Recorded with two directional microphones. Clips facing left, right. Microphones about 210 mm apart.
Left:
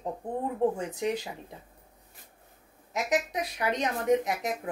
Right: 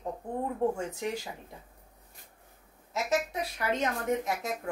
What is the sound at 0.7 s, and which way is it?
Speech, 20° left (ahead or behind).